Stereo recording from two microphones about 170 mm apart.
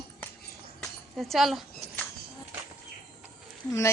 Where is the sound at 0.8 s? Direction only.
Centre (ahead or behind).